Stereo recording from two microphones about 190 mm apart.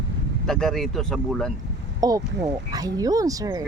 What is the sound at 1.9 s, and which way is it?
Speech, 20° right (ahead or behind).